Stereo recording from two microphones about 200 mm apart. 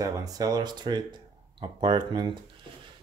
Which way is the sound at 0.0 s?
15° right (ahead or behind).